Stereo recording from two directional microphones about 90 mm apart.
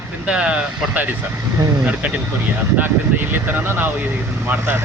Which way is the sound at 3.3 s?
25° right (ahead or behind).